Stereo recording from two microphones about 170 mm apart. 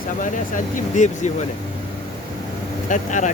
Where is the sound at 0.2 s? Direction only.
50° left (ahead or behind).